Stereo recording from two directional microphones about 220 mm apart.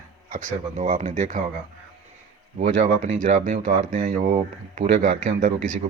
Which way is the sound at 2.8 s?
35° right (ahead or behind).